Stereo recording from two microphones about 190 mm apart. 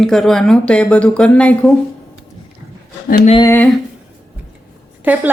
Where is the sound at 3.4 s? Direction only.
10° left (ahead or behind).